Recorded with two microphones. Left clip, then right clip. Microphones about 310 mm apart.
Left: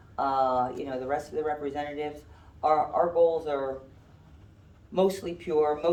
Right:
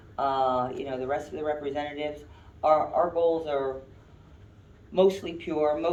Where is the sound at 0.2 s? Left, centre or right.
Centre.